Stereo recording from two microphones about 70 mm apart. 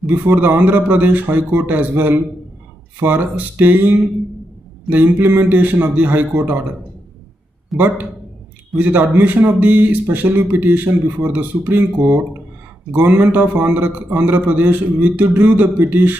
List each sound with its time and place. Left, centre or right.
0.0 s a man's voice: right
7.7 s a man's voice: right
13.2 s a man's voice: right